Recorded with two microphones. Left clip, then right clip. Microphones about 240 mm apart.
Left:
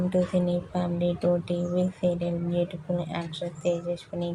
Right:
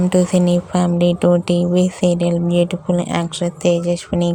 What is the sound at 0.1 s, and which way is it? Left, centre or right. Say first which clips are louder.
Speech: right 9 dB; right.